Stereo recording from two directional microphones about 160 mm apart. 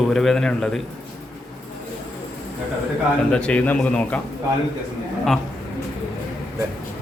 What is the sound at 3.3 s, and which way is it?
Speech, 5° left (ahead or behind).